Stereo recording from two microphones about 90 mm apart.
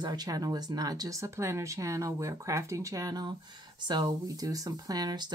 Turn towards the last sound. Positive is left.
turn(degrees=-50)  # may be behind; listen again after turning